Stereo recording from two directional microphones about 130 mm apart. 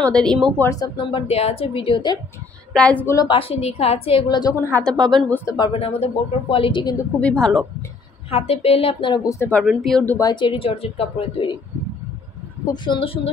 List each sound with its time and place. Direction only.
0.0 s speech: 5° left (ahead or behind)
0.6 s a woman's voice: 25° left (ahead or behind)
2.7 s a woman's voice: 10° left (ahead or behind)
3.2 s a woman's voice: 40° left (ahead or behind)
4.6 s a woman's voice: 15° left (ahead or behind)
5.7 s a woman's voice: 50° left (ahead or behind)
7.2 s speech: 5° left (ahead or behind)
8.3 s a woman's voice: 50° left (ahead or behind)
9.2 s speech: 25° left (ahead or behind)
9.7 s speech: centre (ahead or behind)
10.0 s speech: 25° left (ahead or behind)
10.3 s a woman's voice: 40° left (ahead or behind)
12.6 s speech: 35° left (ahead or behind)